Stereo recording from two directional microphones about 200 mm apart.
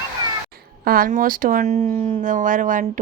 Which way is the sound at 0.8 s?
45° right (ahead or behind).